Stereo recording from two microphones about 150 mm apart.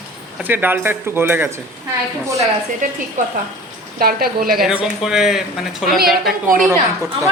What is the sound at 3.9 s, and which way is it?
Speech, 80° right.